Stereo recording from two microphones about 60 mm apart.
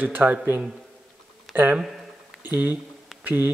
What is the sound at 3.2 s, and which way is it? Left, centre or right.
Speech, right.